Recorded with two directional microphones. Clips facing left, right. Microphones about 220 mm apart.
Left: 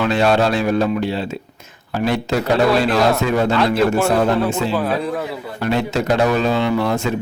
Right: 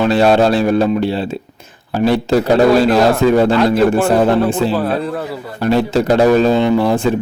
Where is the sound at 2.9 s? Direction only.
30° right (ahead or behind).